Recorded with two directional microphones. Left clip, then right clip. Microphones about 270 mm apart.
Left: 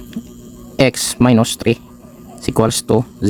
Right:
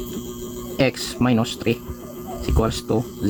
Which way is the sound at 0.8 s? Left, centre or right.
Left.